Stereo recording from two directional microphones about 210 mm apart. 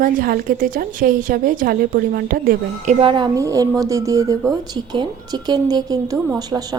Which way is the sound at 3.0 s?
25° right (ahead or behind).